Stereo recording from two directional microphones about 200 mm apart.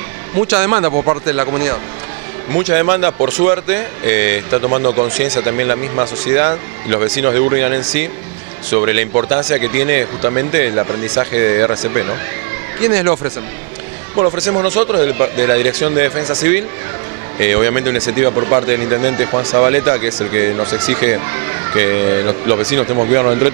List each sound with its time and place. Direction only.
0.5 s speech: 15° right (ahead or behind)
4.6 s speech: 35° right (ahead or behind)
5.2 s speech: 15° right (ahead or behind)
14.1 s speech: 25° right (ahead or behind)
14.6 s speech: 15° right (ahead or behind)
17.4 s speech: 15° right (ahead or behind)